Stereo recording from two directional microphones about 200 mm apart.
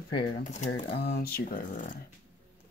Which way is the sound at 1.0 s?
50° left (ahead or behind).